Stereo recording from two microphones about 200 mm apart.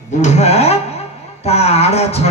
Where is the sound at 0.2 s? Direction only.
35° left (ahead or behind).